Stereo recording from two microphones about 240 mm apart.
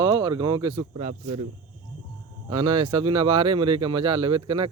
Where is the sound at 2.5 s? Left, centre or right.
Right.